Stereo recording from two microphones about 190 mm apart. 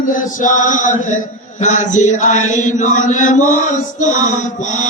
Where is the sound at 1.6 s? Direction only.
40° left (ahead or behind).